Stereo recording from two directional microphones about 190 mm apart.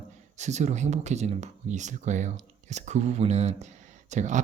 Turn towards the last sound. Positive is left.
turn(degrees=-40)  # may be behind; listen again after turning